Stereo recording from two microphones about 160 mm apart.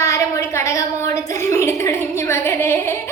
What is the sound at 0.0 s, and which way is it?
A woman's voice, 20° left (ahead or behind).